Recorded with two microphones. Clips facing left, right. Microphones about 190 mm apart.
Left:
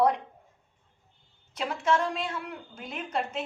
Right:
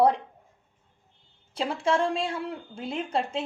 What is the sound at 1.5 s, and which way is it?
A woman's voice, 30° right (ahead or behind).